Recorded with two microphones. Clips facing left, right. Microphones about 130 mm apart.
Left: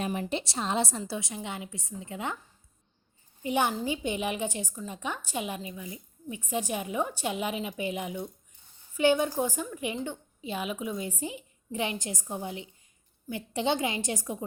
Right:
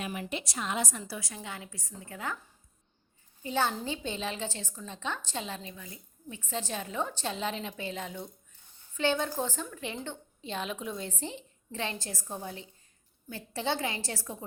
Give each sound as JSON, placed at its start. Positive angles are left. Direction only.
{"t": 0.0, "sound": "a woman's voice", "side_deg": 30}
{"t": 3.4, "sound": "a woman's voice", "side_deg": 15}